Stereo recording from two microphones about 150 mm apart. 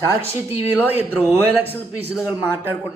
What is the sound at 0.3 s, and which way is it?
Speech, 15° right (ahead or behind).